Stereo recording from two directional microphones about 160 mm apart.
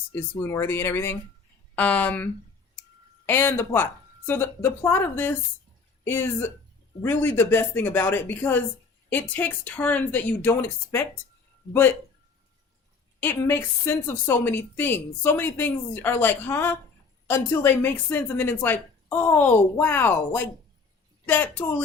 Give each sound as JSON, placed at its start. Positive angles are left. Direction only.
{"t": 0.1, "sound": "a woman's voice", "side_deg": 15}
{"t": 13.1, "sound": "a woman's voice", "side_deg": 15}